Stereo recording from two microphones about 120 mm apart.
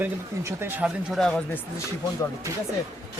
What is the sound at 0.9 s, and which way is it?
Speech, centre (ahead or behind).